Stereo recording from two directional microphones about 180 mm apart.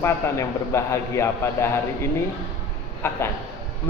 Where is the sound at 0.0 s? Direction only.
15° left (ahead or behind).